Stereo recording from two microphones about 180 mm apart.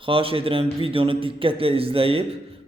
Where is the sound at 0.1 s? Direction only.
30° right (ahead or behind).